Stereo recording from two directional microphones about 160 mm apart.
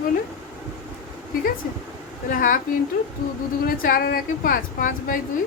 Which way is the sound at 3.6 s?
60° left (ahead or behind).